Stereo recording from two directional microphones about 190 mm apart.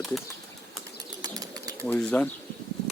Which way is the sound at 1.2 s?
20° right (ahead or behind).